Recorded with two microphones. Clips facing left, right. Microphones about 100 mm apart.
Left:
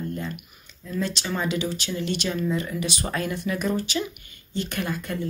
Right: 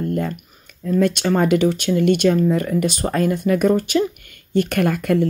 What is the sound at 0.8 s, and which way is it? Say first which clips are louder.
Speech: right 11 dB; 55° right (ahead or behind).